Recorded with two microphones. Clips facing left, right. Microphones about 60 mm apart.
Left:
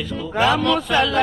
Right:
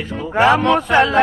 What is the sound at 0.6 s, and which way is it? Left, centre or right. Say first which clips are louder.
Speech: right 5 dB; right.